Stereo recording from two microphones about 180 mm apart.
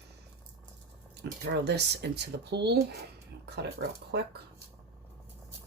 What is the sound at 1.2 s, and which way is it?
Speech, 65° right (ahead or behind).